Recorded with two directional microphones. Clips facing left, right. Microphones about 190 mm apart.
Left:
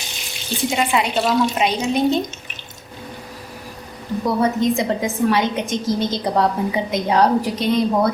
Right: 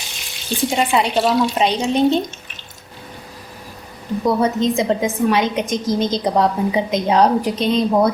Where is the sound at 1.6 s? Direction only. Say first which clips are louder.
Right 2 dB; 30° right (ahead or behind).